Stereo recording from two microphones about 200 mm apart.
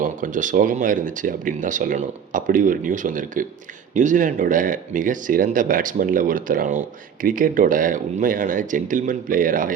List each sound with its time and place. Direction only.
0.0 s speech: 40° right (ahead or behind)